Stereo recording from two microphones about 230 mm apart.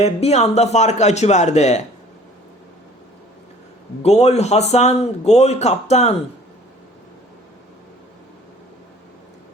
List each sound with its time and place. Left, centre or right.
0.0 s a man's voice: left
4.0 s a man's voice: left